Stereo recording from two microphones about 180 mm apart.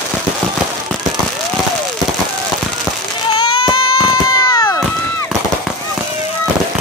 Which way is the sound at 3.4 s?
25° left (ahead or behind).